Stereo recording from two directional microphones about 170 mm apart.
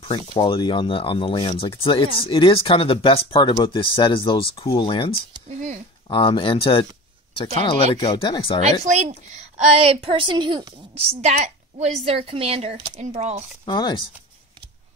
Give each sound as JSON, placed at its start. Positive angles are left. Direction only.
{"t": 0.1, "sound": "speech", "side_deg": 30}
{"t": 5.5, "sound": "a woman's voice", "side_deg": -40}
{"t": 6.0, "sound": "speech", "side_deg": 30}
{"t": 8.9, "sound": "a woman's voice", "side_deg": -40}
{"t": 11.1, "sound": "a woman's voice", "side_deg": -40}
{"t": 13.7, "sound": "speech", "side_deg": 25}